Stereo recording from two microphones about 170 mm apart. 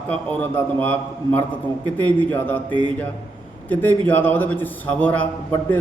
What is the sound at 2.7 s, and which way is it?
Speech, 30° right (ahead or behind).